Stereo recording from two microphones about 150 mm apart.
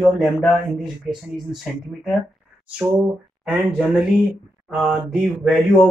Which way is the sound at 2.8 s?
10° right (ahead or behind).